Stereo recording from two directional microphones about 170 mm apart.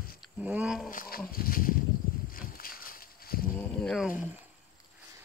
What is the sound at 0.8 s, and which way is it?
Speech, 55° left (ahead or behind).